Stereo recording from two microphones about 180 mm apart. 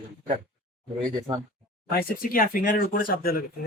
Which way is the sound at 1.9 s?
55° left (ahead or behind).